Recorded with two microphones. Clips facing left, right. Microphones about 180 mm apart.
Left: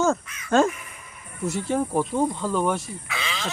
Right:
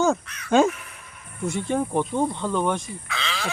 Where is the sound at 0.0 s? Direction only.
Centre (ahead or behind).